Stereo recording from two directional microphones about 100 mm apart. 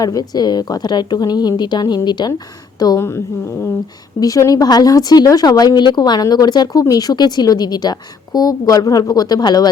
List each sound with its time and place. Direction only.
0.0 s a woman's voice: 40° left (ahead or behind)
4.2 s speech: 35° left (ahead or behind)